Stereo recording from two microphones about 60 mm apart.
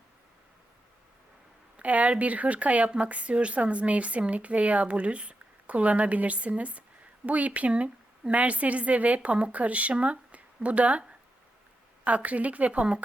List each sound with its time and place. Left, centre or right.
1.7 s speech: right
12.0 s speech: right